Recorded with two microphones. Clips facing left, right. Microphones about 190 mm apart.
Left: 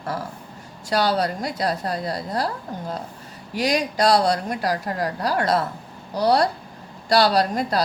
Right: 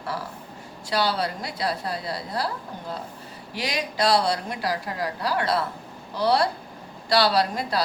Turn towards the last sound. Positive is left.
turn(degrees=45)  # may be behind; listen again after turning